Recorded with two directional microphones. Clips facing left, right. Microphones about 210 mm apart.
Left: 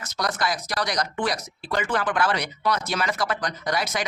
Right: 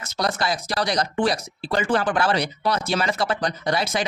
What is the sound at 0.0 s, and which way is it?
Speech, 25° right (ahead or behind).